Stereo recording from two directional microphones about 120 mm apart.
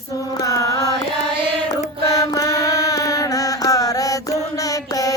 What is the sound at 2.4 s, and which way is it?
Mantra, 30° left (ahead or behind).